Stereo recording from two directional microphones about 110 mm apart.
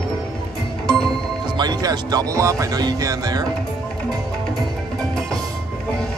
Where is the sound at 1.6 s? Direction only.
35° right (ahead or behind).